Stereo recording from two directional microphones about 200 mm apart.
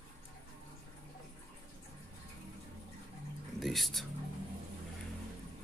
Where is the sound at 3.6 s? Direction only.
Centre (ahead or behind).